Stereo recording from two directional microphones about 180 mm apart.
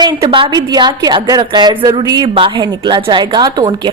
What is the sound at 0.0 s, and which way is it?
A woman's voice, 25° right (ahead or behind).